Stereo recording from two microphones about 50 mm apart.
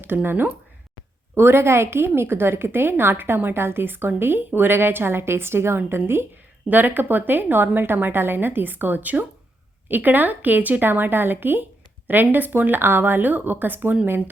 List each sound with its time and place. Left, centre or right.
0.0 s a woman's voice: right
1.4 s a woman's voice: right
6.7 s a woman's voice: right